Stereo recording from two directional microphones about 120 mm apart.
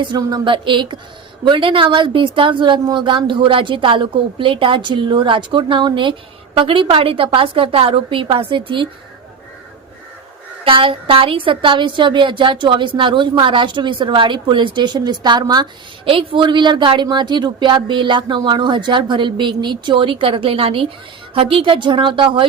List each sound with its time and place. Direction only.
0.0 s a woman's voice: 35° right (ahead or behind)
10.6 s a woman's voice: 50° right (ahead or behind)
16.0 s a woman's voice: 45° right (ahead or behind)